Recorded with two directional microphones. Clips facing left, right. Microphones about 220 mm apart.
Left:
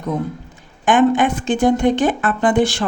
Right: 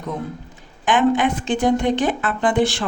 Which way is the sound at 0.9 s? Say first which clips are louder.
Left 3 dB; 45° left (ahead or behind).